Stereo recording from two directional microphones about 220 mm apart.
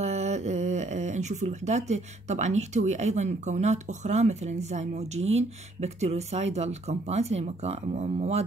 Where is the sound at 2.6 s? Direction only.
30° right (ahead or behind).